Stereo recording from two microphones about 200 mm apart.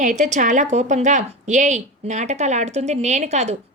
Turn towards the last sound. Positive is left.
turn(degrees=-35)  # may be behind; listen again after turning